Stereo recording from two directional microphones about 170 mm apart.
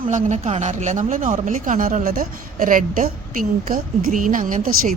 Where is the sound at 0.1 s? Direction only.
45° right (ahead or behind).